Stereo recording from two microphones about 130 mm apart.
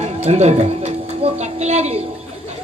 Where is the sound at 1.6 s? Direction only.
60° right (ahead or behind).